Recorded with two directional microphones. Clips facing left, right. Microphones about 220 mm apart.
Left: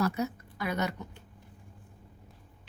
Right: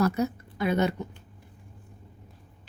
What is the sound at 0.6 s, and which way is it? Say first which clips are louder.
Speech: right 7 dB; 25° right (ahead or behind).